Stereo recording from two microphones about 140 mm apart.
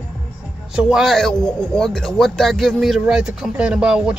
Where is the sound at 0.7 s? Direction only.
5° right (ahead or behind).